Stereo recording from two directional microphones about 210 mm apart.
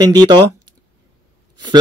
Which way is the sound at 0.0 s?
20° right (ahead or behind).